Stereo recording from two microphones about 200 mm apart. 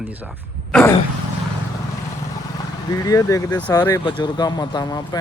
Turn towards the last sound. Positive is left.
turn(degrees=20)  # may be behind; listen again after turning